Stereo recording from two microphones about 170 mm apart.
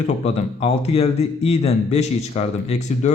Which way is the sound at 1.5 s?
40° left (ahead or behind).